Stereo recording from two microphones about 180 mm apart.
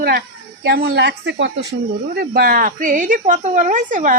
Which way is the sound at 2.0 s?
60° right (ahead or behind).